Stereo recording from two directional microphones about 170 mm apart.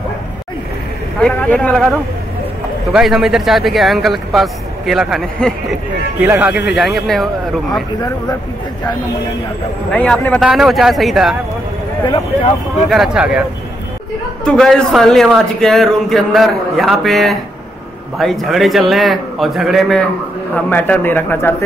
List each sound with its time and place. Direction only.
1.2 s a man's voice: 5° left (ahead or behind)
6.1 s a man's voice: 10° right (ahead or behind)
9.8 s speech: 5° left (ahead or behind)
10.4 s a man's voice: 5° right (ahead or behind)
12.9 s a man's voice: 5° right (ahead or behind)
14.4 s a man's voice: 5° left (ahead or behind)